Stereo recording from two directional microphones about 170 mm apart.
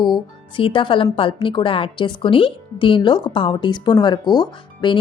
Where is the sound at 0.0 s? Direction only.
30° left (ahead or behind).